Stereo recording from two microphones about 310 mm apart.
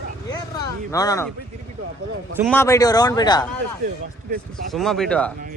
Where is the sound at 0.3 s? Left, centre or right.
Centre.